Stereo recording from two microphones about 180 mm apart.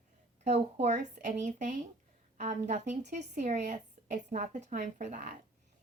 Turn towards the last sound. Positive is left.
turn(degrees=-45)  # may be behind; listen again after turning